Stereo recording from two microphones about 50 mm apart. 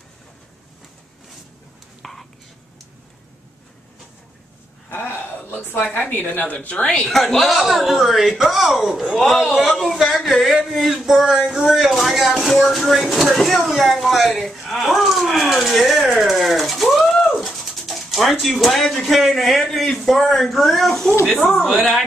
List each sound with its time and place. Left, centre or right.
2.0 s whispering: centre
4.8 s a sound: left
5.9 s a woman's voice: left
7.0 s speech: centre
9.9 s a sound: centre
10.6 s speech: centre